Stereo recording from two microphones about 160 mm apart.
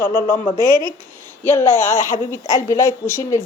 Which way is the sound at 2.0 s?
20° right (ahead or behind).